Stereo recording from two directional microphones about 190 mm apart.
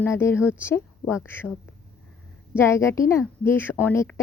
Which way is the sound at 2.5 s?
15° left (ahead or behind).